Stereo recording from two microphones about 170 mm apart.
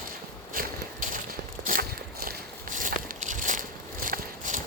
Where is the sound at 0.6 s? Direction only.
55° right (ahead or behind).